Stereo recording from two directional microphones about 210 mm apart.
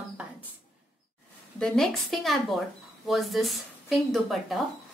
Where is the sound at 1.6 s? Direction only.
Centre (ahead or behind).